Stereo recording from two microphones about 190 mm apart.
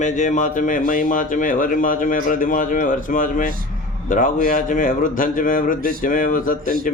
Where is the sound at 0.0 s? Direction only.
40° left (ahead or behind).